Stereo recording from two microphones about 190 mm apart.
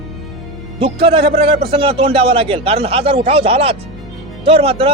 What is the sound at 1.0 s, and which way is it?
A man's voice, 30° right (ahead or behind).